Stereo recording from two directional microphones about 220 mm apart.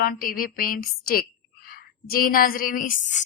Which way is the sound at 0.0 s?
40° left (ahead or behind).